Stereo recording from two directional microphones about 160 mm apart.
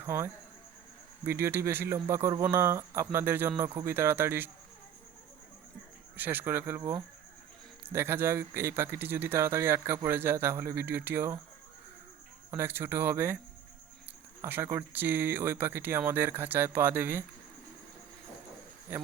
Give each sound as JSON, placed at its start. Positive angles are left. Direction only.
{"t": 0.0, "sound": "a man's voice", "side_deg": -15}
{"t": 6.1, "sound": "a man's voice", "side_deg": -10}
{"t": 12.5, "sound": "a man's voice", "side_deg": -15}
{"t": 14.4, "sound": "a man's voice", "side_deg": -15}